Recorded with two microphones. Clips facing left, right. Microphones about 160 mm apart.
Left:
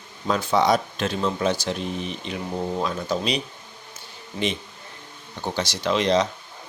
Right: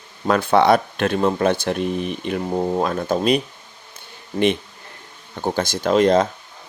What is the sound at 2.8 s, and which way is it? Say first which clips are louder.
Speech: right 6 dB; 55° right (ahead or behind).